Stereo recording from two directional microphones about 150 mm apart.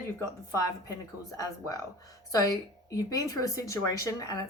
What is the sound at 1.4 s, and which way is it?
Speech, 20° left (ahead or behind).